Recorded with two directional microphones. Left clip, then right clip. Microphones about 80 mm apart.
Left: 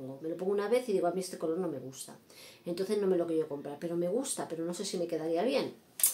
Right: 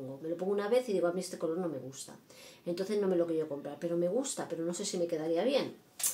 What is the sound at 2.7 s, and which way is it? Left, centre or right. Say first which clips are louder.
Speech: left 1 dB; left.